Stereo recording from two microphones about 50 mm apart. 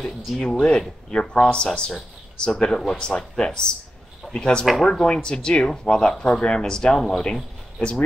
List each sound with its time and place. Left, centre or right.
0.0 s speech: centre
4.6 s speech: centre
4.9 s speech: centre